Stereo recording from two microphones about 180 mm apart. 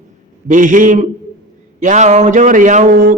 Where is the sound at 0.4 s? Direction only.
45° right (ahead or behind).